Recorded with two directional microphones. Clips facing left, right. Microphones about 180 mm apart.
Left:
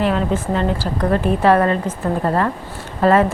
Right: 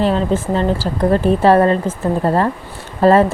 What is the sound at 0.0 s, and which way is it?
A woman's voice, 30° right (ahead or behind).